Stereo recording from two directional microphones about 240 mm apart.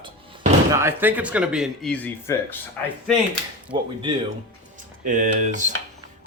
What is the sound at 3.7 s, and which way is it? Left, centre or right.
Speech, right.